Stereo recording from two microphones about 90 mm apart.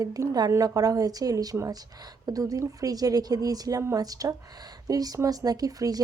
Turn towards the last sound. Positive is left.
turn(degrees=-45)  # may be behind; listen again after turning